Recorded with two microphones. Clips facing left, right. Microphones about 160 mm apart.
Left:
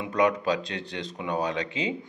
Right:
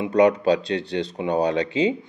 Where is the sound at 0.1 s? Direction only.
35° right (ahead or behind).